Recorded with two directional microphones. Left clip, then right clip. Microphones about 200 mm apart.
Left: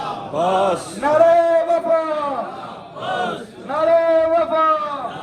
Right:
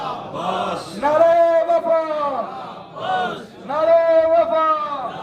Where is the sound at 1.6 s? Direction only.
35° right (ahead or behind).